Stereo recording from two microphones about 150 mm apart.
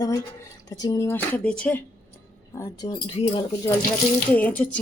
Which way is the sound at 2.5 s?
25° left (ahead or behind).